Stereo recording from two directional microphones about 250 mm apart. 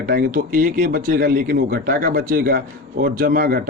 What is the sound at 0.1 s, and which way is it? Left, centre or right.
Speech, right.